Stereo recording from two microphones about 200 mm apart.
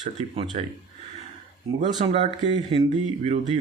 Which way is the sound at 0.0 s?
35° right (ahead or behind).